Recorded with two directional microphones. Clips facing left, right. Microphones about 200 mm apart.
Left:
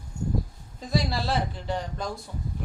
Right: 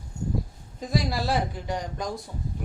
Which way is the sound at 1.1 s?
15° right (ahead or behind).